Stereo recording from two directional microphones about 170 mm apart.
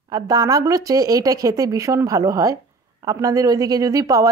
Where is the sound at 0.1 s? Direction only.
20° right (ahead or behind).